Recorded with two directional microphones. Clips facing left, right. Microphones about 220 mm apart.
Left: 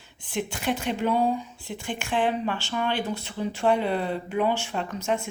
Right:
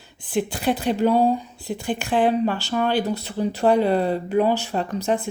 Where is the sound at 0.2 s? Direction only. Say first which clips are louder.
Right 6 dB; 35° right (ahead or behind).